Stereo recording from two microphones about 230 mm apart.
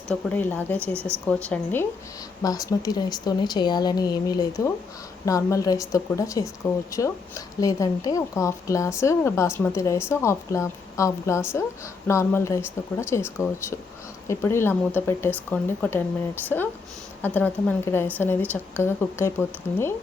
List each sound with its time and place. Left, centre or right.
0.1 s a woman's voice: centre
0.9 s speech: centre
1.5 s a woman's voice: centre